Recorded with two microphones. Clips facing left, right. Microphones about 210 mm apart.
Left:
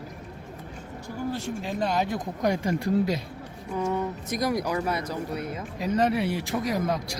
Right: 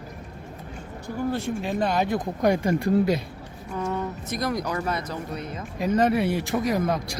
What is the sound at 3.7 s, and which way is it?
Speech, 15° left (ahead or behind).